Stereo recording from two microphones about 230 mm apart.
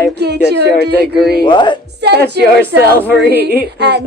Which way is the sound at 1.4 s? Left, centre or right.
Centre.